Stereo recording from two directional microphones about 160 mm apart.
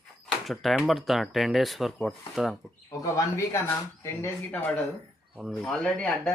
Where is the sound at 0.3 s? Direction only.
Centre (ahead or behind).